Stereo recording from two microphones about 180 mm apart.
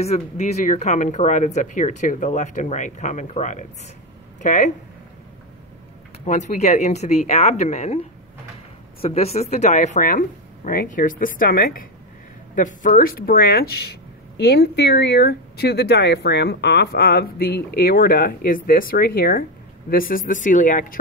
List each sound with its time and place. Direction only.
0.0 s speech: 40° left (ahead or behind)
6.2 s speech: 40° left (ahead or behind)